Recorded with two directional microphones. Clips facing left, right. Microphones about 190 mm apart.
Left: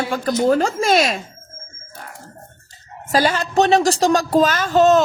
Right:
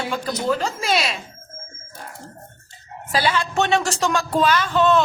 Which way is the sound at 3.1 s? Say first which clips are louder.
Left 4 dB; 45° left (ahead or behind).